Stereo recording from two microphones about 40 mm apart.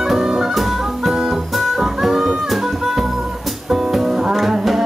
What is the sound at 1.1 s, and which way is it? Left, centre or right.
Music, centre.